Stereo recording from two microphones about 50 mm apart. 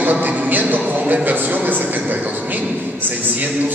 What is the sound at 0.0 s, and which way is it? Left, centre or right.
A man's voice, right.